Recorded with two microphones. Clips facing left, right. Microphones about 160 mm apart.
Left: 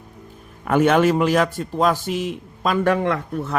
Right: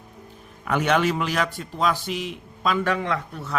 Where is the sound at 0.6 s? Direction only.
45° left (ahead or behind).